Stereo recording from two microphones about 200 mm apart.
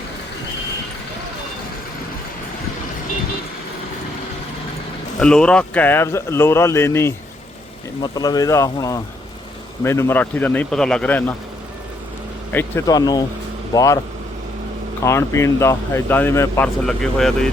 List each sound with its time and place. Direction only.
5.2 s speech: 5° left (ahead or behind)
12.5 s speech: 10° left (ahead or behind)
15.0 s speech: 15° left (ahead or behind)
16.8 s speech: centre (ahead or behind)